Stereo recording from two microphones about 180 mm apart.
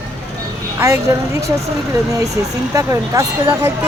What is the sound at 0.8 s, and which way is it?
Speech, 15° right (ahead or behind).